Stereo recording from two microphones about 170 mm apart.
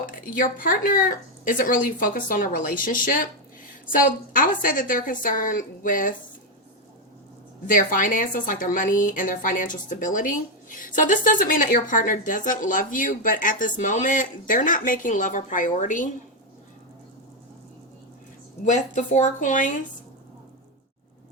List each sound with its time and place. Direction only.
0.0 s a woman's voice: 55° left (ahead or behind)
7.7 s a woman's voice: 55° left (ahead or behind)
18.6 s a woman's voice: 45° left (ahead or behind)